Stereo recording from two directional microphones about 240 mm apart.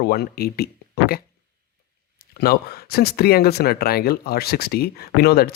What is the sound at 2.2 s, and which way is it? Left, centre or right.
Speech, left.